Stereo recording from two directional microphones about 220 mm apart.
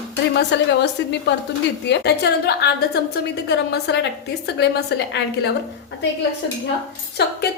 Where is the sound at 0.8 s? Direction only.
50° left (ahead or behind).